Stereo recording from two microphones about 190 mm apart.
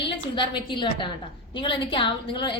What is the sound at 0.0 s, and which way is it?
A woman's voice, 25° left (ahead or behind).